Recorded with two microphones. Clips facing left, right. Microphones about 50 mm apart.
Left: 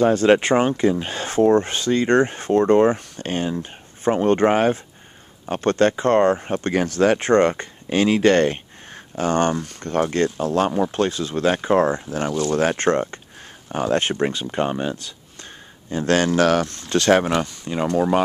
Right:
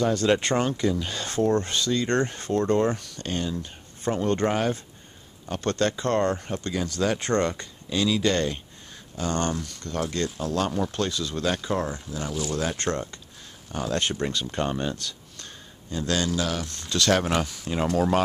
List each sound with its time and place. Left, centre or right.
0.0 s speech: left
6.5 s speech: left
9.1 s speech: left
14.4 s speech: centre
15.9 s speech: left
16.9 s speech: left
17.3 s speech: centre